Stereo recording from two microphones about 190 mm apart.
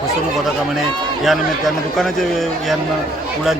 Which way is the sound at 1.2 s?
Centre (ahead or behind).